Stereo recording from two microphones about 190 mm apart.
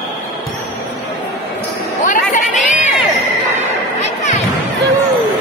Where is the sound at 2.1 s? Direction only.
40° left (ahead or behind).